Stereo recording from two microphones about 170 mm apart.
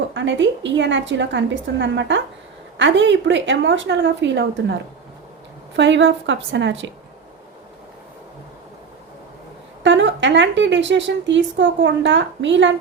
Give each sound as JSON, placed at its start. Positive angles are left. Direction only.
{"t": 0.1, "sound": "a woman's voice", "side_deg": -90}
{"t": 9.8, "sound": "a woman's voice", "side_deg": -90}